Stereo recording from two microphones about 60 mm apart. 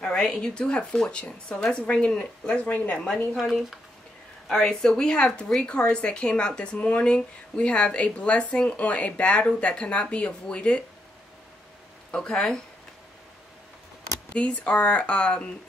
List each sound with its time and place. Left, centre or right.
0.0 s a woman's voice: centre; by 3.0 s left
3.3 s speech: centre
4.5 s a woman's voice: centre
12.1 s a woman's voice: centre
14.3 s a woman's voice: centre